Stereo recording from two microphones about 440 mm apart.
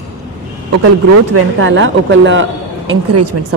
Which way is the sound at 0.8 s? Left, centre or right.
Right.